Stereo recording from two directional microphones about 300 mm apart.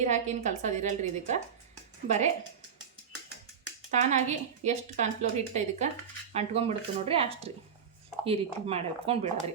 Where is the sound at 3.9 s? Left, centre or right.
Right.